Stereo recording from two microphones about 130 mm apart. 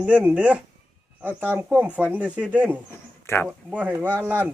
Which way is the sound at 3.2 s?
20° left (ahead or behind).